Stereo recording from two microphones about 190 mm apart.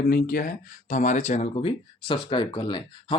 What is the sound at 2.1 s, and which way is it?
Speech, 25° left (ahead or behind).